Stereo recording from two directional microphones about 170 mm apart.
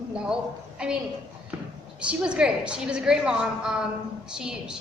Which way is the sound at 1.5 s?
10° right (ahead or behind).